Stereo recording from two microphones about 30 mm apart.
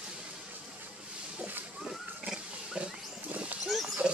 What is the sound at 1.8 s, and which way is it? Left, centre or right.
Pig, centre.